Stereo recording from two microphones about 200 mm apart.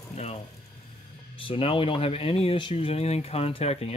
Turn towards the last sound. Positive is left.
turn(degrees=30)  # may be behind; listen again after turning